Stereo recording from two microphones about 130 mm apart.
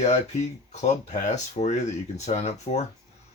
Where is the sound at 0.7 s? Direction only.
65° left (ahead or behind).